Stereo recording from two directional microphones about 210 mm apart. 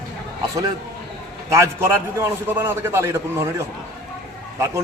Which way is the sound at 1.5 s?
10° right (ahead or behind).